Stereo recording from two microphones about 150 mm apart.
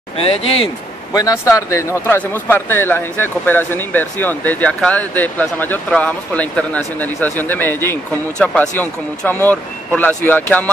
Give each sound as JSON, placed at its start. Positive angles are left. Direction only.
{"t": 0.2, "sound": "speech", "side_deg": 40}
{"t": 1.1, "sound": "speech", "side_deg": 20}